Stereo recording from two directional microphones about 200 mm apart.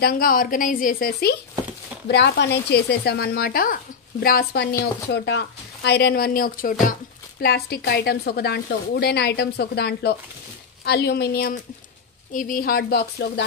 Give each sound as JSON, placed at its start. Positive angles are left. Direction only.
{"t": 0.0, "sound": "speech", "side_deg": 45}
{"t": 2.0, "sound": "speech", "side_deg": 55}